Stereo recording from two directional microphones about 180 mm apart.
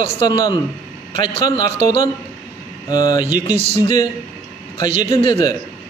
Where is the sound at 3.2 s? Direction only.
40° right (ahead or behind).